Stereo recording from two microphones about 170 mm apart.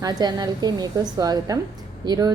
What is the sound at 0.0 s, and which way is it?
A woman's voice, 25° right (ahead or behind).